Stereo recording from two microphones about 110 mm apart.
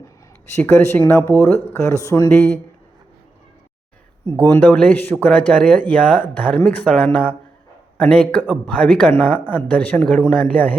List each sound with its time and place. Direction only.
0.5 s speech: 25° left (ahead or behind)
4.4 s speech: 20° left (ahead or behind)